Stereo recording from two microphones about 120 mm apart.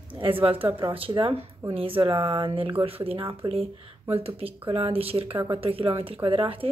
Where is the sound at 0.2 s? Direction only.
50° right (ahead or behind).